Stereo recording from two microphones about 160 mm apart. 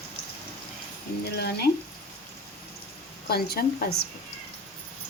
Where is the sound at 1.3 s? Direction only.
85° left.